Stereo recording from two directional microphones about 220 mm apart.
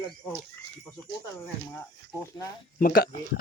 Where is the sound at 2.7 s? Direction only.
40° left (ahead or behind).